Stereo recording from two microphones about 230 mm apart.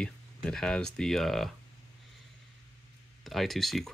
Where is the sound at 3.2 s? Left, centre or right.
Centre.